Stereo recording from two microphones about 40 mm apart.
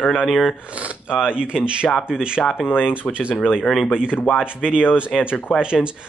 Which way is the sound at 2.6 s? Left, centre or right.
Left.